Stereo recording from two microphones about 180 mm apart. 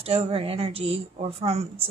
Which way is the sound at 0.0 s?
30° right (ahead or behind).